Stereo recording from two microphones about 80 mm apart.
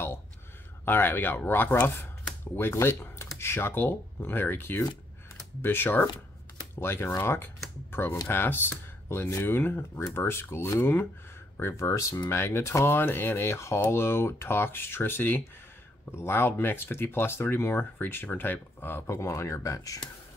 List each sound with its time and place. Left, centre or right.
0.8 s speech: left